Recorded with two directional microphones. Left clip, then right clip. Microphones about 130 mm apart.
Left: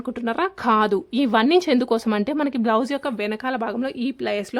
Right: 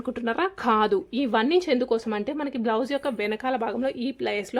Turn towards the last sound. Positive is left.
turn(degrees=25)  # may be behind; listen again after turning